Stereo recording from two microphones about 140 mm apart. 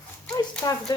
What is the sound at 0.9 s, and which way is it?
Speech, 30° left (ahead or behind).